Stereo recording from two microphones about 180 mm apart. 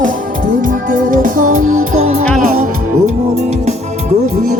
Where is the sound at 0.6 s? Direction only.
45° right (ahead or behind).